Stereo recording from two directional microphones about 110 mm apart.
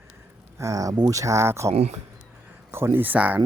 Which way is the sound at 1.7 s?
75° right (ahead or behind).